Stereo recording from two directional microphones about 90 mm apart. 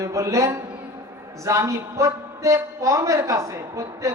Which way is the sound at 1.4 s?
35° right (ahead or behind).